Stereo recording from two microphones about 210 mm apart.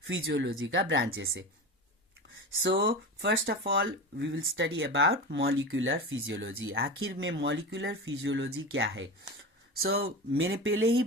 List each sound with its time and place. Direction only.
0.0 s speech: 70° right (ahead or behind)
2.6 s speech: 55° right (ahead or behind); by 10.8 s 75° right (ahead or behind)